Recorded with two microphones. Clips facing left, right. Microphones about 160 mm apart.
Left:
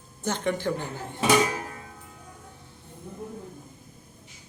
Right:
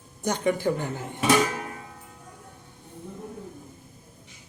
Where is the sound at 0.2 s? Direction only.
10° right (ahead or behind).